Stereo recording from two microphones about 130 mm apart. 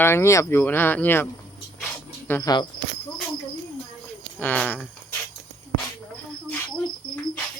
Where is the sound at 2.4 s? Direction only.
35° left (ahead or behind).